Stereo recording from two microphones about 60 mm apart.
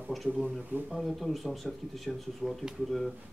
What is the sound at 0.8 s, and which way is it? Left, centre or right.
A man's voice, centre.